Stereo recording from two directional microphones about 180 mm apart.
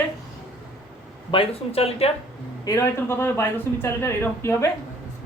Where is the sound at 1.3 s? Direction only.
30° left (ahead or behind).